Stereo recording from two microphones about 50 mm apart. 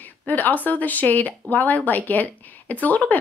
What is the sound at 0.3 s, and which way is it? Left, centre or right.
Speech, left.